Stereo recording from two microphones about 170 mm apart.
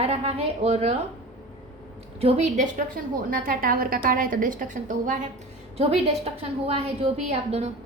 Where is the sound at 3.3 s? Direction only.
55° right (ahead or behind).